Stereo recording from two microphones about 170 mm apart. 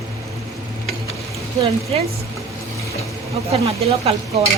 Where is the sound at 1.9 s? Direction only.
30° right (ahead or behind).